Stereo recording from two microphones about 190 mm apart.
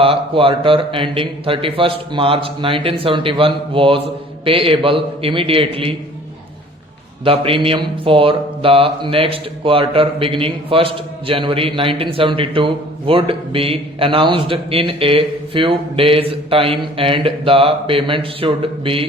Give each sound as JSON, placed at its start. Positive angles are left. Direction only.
{"t": 0.0, "sound": "speech", "side_deg": -30}
{"t": 7.3, "sound": "speech", "side_deg": -30}